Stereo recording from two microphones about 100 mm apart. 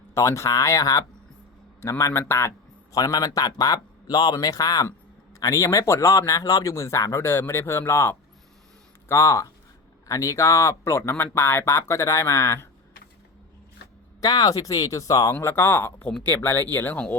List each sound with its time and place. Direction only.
0.1 s speech: 30° left (ahead or behind)
2.9 s speech: 40° left (ahead or behind)
14.2 s speech: 40° left (ahead or behind); by 17.2 s 20° left (ahead or behind)